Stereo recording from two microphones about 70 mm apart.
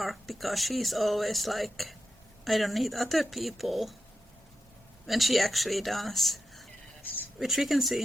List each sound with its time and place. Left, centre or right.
0.0 s speech: centre
5.0 s speech: centre
7.0 s a sound: left
7.3 s speech: centre